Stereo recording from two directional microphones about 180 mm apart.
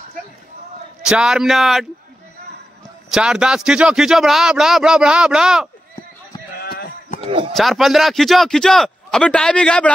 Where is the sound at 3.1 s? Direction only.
5° right (ahead or behind).